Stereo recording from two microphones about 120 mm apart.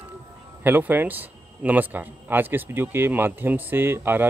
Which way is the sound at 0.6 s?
15° right (ahead or behind).